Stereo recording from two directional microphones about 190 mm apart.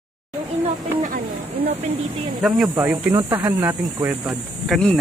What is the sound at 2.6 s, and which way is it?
Speech, 15° right (ahead or behind).